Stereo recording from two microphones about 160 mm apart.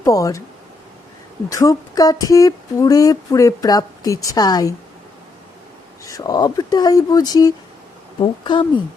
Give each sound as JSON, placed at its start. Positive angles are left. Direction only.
{"t": 0.0, "sound": "speech", "side_deg": 20}
{"t": 1.5, "sound": "speech", "side_deg": 20}
{"t": 6.1, "sound": "speech", "side_deg": 20}